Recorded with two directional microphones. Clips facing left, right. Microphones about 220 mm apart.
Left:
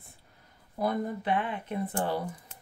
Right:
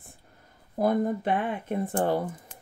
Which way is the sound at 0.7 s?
50° right (ahead or behind).